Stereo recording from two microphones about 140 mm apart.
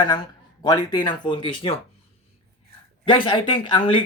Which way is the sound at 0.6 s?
30° left (ahead or behind).